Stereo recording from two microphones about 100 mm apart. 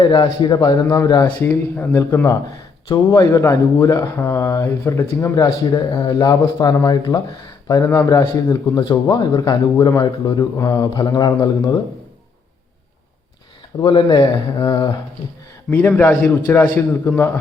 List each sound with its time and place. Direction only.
0.0 s speech: 50° left (ahead or behind)
1.4 s a man's voice: 20° left (ahead or behind)
2.2 s a man's voice: 40° left (ahead or behind)
5.4 s a man's voice: 45° left (ahead or behind)
10.4 s a man's voice: 35° left (ahead or behind)
13.8 s speech: 55° left (ahead or behind)
14.6 s a man's voice: 35° left (ahead or behind)
15.7 s a man's voice: 15° left (ahead or behind)